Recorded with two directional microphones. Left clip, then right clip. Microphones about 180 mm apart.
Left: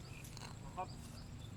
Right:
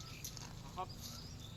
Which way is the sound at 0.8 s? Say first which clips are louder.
Even; 45° left (ahead or behind).